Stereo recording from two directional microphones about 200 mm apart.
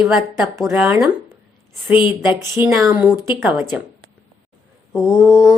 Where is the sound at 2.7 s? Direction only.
5° right (ahead or behind).